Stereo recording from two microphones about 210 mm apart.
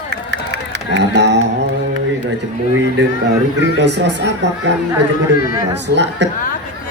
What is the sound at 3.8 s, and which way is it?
Speech, 55° right (ahead or behind).